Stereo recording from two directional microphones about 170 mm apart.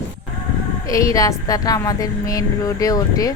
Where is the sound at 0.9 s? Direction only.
20° left (ahead or behind).